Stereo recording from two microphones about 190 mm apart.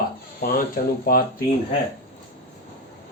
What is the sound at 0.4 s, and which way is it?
Speech, 50° left (ahead or behind).